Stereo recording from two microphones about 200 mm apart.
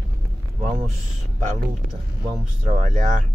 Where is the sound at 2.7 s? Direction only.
40° right (ahead or behind).